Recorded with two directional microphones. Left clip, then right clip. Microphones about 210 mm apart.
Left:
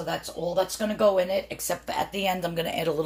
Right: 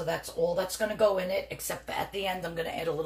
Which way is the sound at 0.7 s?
40° left (ahead or behind).